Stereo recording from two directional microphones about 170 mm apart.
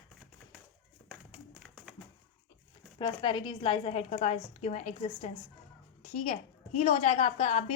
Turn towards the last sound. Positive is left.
turn(degrees=35)  # may be behind; listen again after turning